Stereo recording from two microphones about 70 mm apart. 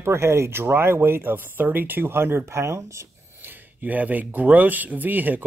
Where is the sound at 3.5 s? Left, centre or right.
Right.